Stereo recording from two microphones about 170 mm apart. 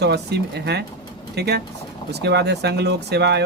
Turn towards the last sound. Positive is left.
turn(degrees=-85)